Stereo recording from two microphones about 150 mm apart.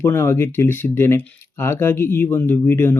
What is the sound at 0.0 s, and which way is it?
Speech, 15° left (ahead or behind).